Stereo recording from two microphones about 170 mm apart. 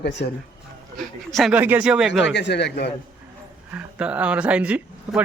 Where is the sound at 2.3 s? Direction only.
90° left.